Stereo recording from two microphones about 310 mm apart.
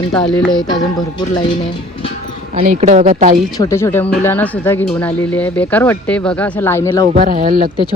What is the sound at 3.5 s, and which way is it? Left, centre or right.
Speech, centre.